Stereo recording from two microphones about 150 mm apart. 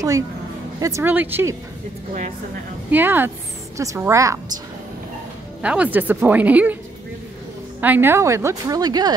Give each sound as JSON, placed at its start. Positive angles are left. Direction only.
{"t": 0.7, "sound": "a woman's voice", "side_deg": -20}
{"t": 2.9, "sound": "a woman's voice", "side_deg": -15}
{"t": 5.6, "sound": "speech", "side_deg": -10}
{"t": 7.8, "sound": "a woman's voice", "side_deg": -15}